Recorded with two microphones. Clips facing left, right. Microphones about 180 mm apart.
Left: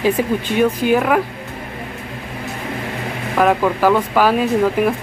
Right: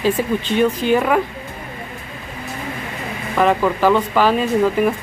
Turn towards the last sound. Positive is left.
turn(degrees=10)  # may be behind; listen again after turning